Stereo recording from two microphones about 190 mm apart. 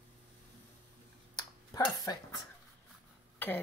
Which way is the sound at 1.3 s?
20° left (ahead or behind).